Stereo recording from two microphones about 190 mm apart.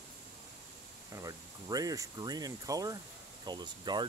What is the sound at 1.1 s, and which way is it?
Speech, 20° right (ahead or behind).